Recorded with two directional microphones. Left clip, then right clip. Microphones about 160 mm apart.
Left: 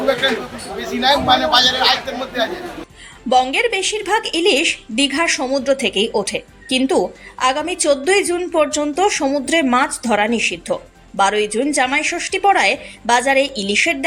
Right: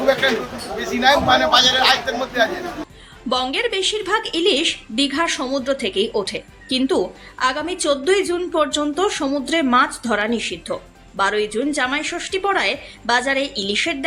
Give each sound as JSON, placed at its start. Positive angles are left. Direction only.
{"t": 0.8, "sound": "a man's voice", "side_deg": 0}